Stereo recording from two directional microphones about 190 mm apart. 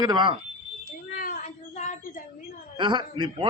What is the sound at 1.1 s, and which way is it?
Speech, 45° left (ahead or behind).